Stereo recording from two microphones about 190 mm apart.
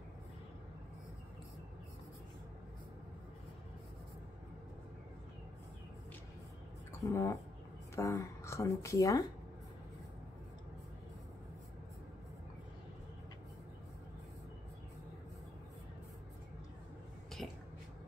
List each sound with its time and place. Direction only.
7.0 s speech: 15° left (ahead or behind)